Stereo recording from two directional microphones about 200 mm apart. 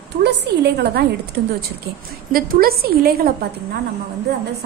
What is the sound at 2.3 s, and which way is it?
A woman's voice, 45° right (ahead or behind).